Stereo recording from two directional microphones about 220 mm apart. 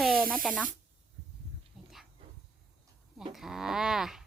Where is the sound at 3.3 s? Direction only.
Centre (ahead or behind).